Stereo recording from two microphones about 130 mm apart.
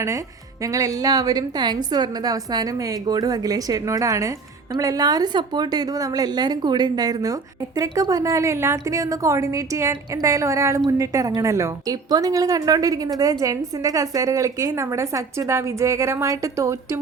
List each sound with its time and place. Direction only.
0.6 s a woman's voice: 25° right (ahead or behind)